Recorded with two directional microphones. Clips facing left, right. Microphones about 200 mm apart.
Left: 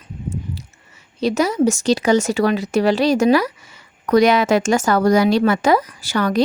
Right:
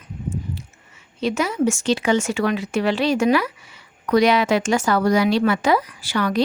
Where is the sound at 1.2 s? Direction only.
40° left (ahead or behind).